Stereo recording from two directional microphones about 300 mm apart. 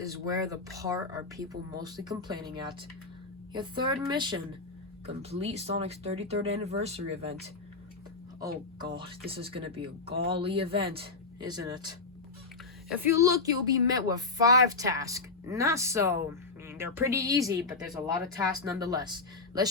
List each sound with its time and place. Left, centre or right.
0.0 s speech: centre
8.8 s speech: centre
12.9 s speech: centre